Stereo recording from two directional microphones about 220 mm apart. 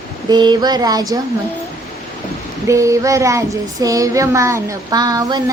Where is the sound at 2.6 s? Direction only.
15° right (ahead or behind).